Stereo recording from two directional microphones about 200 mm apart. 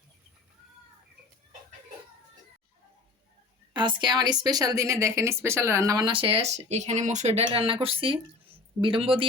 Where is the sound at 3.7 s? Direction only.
25° right (ahead or behind).